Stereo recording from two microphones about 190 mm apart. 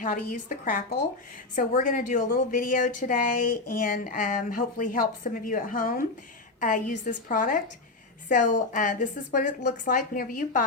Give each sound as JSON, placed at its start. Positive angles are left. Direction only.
{"t": 0.0, "sound": "a woman's voice", "side_deg": 45}